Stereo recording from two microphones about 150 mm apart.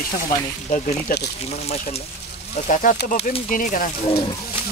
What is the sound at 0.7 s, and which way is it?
Speech, 65° left (ahead or behind).